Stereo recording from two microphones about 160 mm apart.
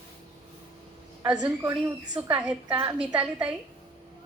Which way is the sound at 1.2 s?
5° right (ahead or behind).